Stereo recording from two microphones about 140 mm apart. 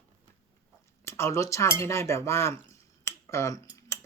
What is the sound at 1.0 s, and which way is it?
Speech, 20° left (ahead or behind).